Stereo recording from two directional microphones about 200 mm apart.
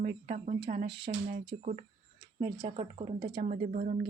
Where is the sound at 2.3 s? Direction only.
25° right (ahead or behind).